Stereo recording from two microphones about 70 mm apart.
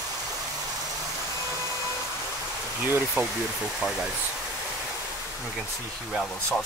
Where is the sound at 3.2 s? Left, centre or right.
Right.